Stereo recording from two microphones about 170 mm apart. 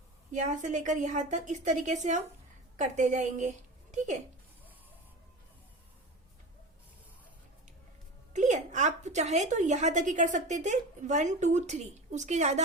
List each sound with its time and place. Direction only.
0.3 s a woman's voice: 45° right (ahead or behind)
8.3 s a woman's voice: 45° right (ahead or behind)